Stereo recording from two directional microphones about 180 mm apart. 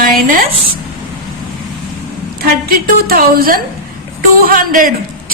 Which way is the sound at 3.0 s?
55° right (ahead or behind).